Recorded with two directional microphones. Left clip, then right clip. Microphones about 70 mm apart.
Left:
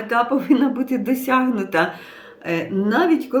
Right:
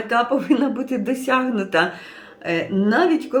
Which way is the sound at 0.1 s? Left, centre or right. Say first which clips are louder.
Left 1 dB; left.